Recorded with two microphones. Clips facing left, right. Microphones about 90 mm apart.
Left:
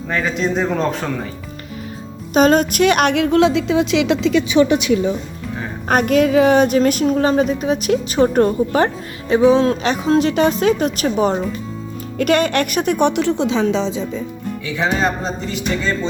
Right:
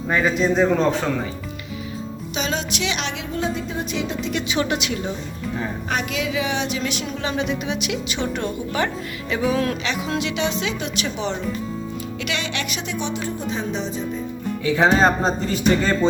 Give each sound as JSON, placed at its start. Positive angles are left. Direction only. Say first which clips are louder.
{"t": 0.1, "sound": "a man's voice", "louder": "even", "side_deg": -5}
{"t": 2.3, "sound": "a woman's voice", "louder": "left 13 dB", "side_deg": 50}
{"t": 5.9, "sound": "a woman's voice", "louder": "left 12 dB", "side_deg": 50}
{"t": 9.3, "sound": "speech", "louder": "left 9 dB", "side_deg": 30}
{"t": 9.8, "sound": "a woman's voice", "louder": "left 9 dB", "side_deg": 40}
{"t": 14.8, "sound": "speech", "louder": "right 2 dB", "side_deg": -35}